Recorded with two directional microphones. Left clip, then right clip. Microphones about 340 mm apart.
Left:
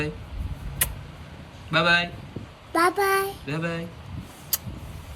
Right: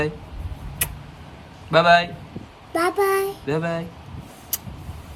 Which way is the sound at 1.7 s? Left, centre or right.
Centre.